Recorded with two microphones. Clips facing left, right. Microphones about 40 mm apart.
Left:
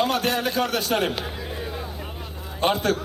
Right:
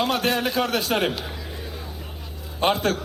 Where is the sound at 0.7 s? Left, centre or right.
Centre.